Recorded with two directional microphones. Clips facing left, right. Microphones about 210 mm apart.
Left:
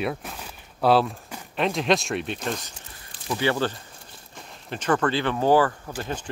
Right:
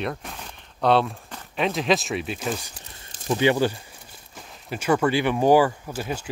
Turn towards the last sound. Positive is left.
turn(degrees=-10)  # may be behind; listen again after turning